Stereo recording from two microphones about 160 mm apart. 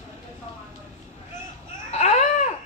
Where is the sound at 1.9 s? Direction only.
45° left (ahead or behind).